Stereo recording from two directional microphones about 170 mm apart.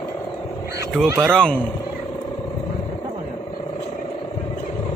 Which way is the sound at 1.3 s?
5° left (ahead or behind).